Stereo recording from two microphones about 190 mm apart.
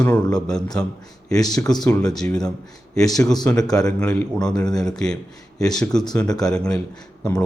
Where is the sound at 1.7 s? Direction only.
5° left (ahead or behind).